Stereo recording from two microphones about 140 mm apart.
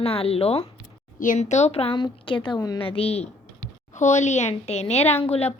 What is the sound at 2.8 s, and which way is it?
Speech, 45° left (ahead or behind).